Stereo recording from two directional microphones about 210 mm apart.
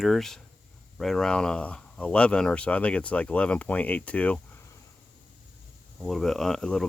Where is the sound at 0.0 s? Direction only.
Centre (ahead or behind).